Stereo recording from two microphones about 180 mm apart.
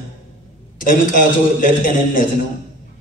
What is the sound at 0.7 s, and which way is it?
Speech, 50° left (ahead or behind).